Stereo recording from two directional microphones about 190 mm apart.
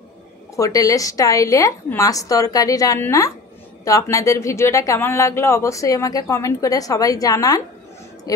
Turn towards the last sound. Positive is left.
turn(degrees=20)  # may be behind; listen again after turning